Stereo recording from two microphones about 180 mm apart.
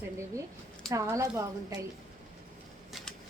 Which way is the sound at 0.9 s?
15° right (ahead or behind).